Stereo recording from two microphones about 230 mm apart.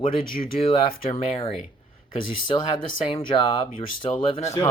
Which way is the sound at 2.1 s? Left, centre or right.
Left.